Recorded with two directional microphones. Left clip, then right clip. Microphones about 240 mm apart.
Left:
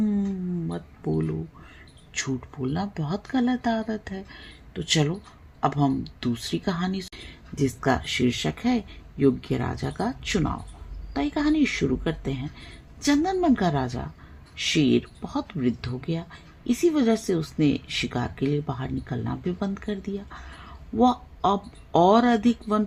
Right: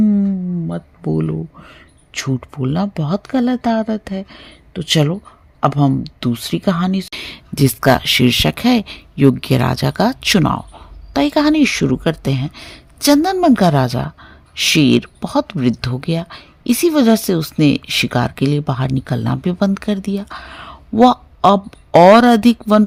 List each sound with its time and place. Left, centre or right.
0.7 s speech: right